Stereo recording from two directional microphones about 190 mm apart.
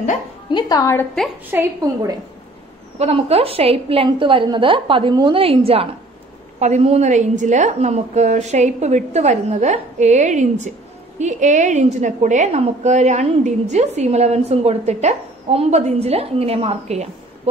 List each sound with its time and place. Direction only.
0.5 s a woman's voice: 20° left (ahead or behind)
1.5 s a woman's voice: 15° right (ahead or behind)
3.0 s a woman's voice: 30° right (ahead or behind)